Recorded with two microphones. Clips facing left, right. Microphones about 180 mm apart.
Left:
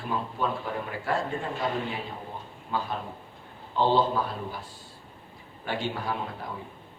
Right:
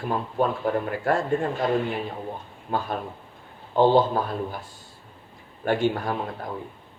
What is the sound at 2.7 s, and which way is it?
A man's voice, 55° right (ahead or behind).